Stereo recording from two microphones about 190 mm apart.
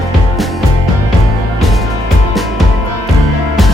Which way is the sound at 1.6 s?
Centre (ahead or behind).